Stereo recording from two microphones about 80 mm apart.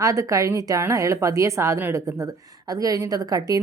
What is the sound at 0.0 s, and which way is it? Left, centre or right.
A woman's voice, right.